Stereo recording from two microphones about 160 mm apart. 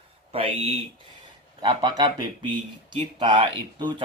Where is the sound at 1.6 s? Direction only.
25° right (ahead or behind).